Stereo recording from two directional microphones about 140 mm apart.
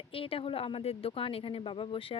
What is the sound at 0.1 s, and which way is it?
A woman's voice, 40° left (ahead or behind).